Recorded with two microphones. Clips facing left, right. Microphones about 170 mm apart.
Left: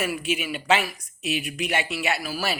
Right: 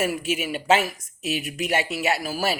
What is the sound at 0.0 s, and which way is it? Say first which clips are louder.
Speech: right 2 dB; 45° right (ahead or behind).